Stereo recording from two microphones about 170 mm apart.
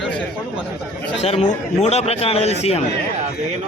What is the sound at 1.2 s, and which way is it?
A man's voice, 40° left (ahead or behind).